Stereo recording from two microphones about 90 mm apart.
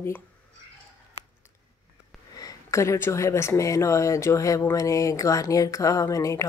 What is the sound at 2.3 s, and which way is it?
Speech, 40° left (ahead or behind).